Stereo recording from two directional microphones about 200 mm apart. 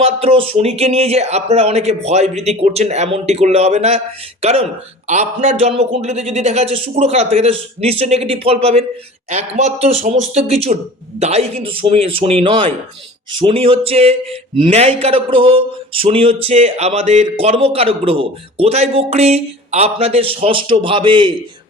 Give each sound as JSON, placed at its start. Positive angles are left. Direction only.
{"t": 0.0, "sound": "speech", "side_deg": -30}